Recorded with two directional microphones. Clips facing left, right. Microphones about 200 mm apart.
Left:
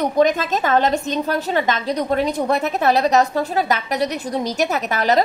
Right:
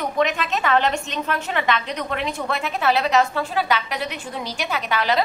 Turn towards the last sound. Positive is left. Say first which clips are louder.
# left 4 dB
turn(degrees=45)  # may be behind; listen again after turning